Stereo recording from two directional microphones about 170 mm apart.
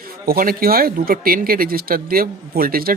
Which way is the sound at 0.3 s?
60° right (ahead or behind).